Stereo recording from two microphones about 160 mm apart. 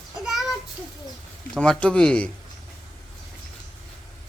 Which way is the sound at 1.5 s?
5° left (ahead or behind).